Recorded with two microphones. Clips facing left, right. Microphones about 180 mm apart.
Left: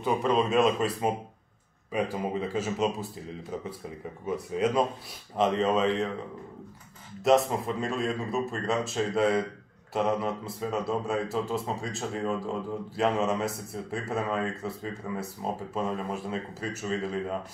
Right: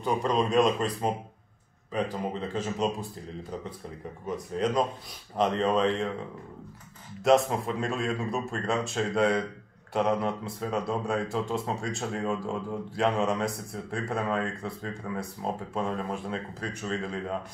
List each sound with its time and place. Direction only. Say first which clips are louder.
0.0 s speech: left 1 dB; 5° left (ahead or behind)
4.3 s speech: left 1 dB; 5° left (ahead or behind)
7.2 s speech: even; centre (ahead or behind)